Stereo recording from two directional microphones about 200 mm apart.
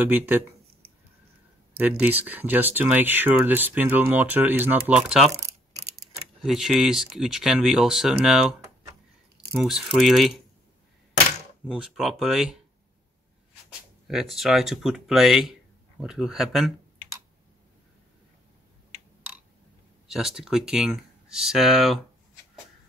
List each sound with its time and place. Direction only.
0.0 s speech: 10° right (ahead or behind)
1.8 s speech: 10° right (ahead or behind)
6.4 s speech: centre (ahead or behind)
11.6 s speech: 5° right (ahead or behind)
14.0 s speech: centre (ahead or behind)
20.1 s speech: centre (ahead or behind)